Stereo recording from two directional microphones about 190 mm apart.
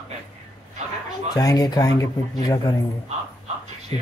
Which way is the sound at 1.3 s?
20° left (ahead or behind).